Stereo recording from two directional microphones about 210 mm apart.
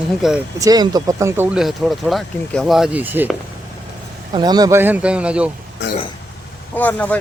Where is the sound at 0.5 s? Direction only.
15° right (ahead or behind).